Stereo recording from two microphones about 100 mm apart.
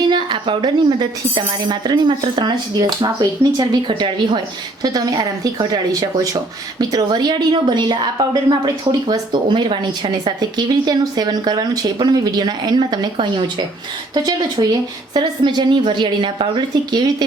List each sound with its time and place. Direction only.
0.1 s speech: 50° right (ahead or behind)
4.8 s speech: 40° right (ahead or behind)
14.1 s speech: 45° right (ahead or behind)